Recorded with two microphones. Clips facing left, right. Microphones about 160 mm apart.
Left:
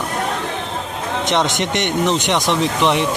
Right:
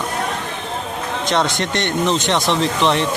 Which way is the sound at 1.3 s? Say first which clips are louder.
Even; 20° left (ahead or behind).